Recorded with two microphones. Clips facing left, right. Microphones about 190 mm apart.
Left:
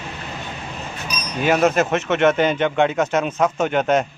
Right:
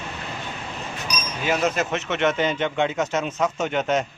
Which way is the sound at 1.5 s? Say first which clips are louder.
Left 6 dB; 55° left (ahead or behind).